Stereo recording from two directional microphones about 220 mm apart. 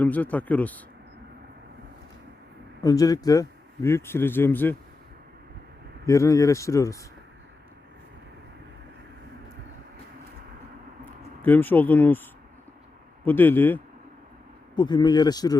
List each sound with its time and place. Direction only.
0.0 s speech: 5° left (ahead or behind)
2.8 s speech: 15° left (ahead or behind)
6.1 s speech: 15° left (ahead or behind)
11.4 s speech: 10° left (ahead or behind)
13.2 s speech: 10° left (ahead or behind)
14.8 s speech: 20° left (ahead or behind)